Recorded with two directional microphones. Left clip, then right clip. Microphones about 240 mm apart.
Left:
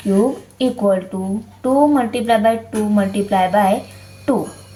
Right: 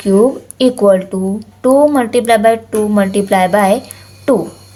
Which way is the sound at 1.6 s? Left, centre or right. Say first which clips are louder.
Right 5 dB; right.